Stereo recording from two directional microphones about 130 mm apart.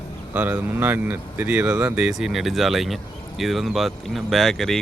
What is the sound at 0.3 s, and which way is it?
Speech, 15° right (ahead or behind).